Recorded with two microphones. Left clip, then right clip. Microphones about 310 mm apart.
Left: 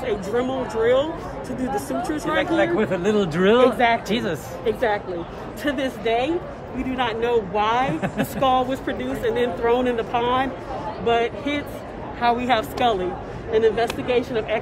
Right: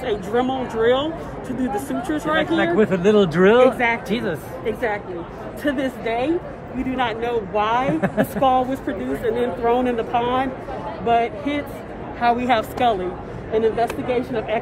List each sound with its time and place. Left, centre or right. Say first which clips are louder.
0.0 s speech: right 2 dB; centre
3.4 s speech: even; centre